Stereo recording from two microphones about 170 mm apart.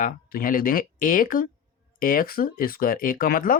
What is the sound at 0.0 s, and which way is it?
Speech, 55° left (ahead or behind).